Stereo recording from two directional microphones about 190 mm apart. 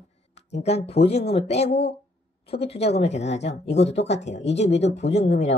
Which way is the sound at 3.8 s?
35° left (ahead or behind).